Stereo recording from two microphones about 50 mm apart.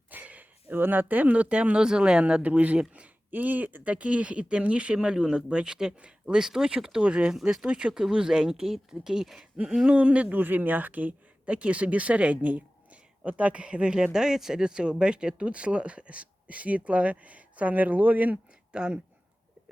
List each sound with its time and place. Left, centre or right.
0.1 s a sound: right
0.8 s speech: right; by 2.4 s centre
2.4 s speech: right
3.9 s speech: right; by 9.9 s centre
9.9 s speech: right
10.3 s speech: right
18.7 s speech: right